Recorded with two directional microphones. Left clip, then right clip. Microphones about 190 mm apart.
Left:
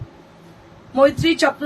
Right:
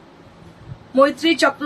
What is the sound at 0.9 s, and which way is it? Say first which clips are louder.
Speech: even; 20° right (ahead or behind).